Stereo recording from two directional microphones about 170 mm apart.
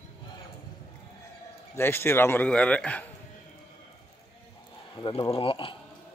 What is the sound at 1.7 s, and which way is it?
A man's voice, 15° left (ahead or behind).